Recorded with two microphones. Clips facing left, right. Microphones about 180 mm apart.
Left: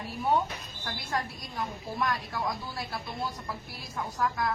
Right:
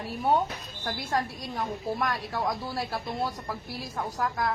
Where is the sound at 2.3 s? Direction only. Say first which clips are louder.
Right 4 dB; 35° right (ahead or behind).